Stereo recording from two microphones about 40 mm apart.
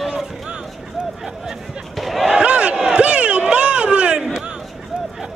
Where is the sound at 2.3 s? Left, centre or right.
Right.